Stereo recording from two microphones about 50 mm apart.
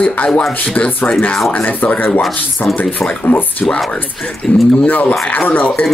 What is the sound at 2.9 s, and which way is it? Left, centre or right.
Speech, left.